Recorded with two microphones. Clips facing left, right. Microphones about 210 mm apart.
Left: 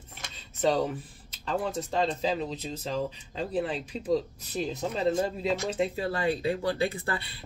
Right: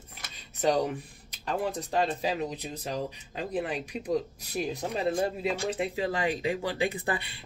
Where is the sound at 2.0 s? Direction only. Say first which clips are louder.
Even; 15° right (ahead or behind).